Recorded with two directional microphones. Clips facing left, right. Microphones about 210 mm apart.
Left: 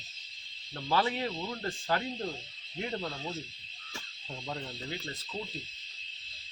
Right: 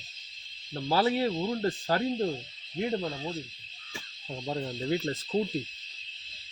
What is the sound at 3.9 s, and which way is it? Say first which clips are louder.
Owl: right 4 dB; 20° right (ahead or behind).